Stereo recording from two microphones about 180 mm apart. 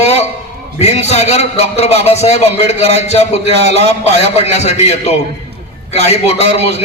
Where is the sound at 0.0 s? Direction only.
35° left (ahead or behind).